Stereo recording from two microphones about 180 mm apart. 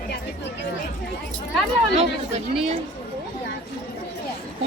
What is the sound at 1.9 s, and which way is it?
Speech, 40° right (ahead or behind).